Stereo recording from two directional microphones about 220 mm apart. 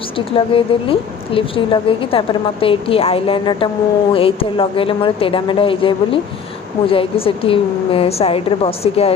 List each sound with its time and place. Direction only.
0.3 s a woman's voice: 25° left (ahead or behind)